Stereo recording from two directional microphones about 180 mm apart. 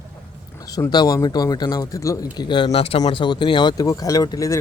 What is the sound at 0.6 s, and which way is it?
A man's voice, 20° left (ahead or behind).